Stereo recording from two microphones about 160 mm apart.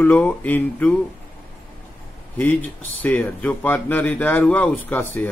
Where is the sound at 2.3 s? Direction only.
10° left (ahead or behind).